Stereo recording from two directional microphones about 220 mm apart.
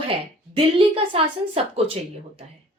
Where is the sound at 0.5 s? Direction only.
25° right (ahead or behind).